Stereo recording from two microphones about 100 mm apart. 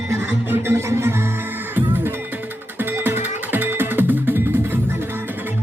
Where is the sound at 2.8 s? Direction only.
20° right (ahead or behind).